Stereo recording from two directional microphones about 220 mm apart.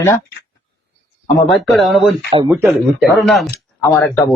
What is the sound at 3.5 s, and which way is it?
Speech, 15° left (ahead or behind).